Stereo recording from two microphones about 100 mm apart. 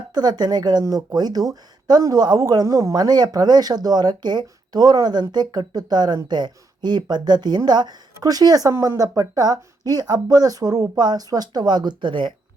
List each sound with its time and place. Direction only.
0.1 s speech: 45° right (ahead or behind)